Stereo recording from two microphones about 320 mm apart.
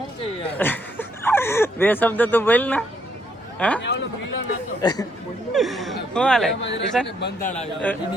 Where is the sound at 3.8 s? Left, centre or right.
Left.